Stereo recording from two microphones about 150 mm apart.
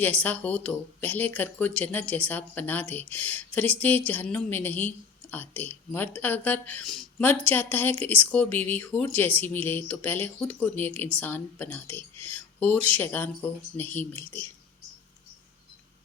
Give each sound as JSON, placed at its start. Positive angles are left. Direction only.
{"t": 0.0, "sound": "speech", "side_deg": 10}